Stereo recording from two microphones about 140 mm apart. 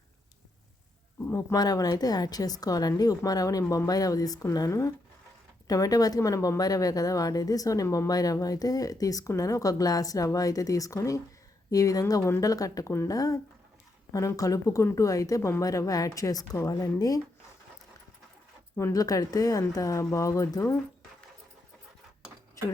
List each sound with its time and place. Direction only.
1.3 s speech: 20° left (ahead or behind)
18.8 s speech: 25° left (ahead or behind)
22.6 s speech: 25° left (ahead or behind)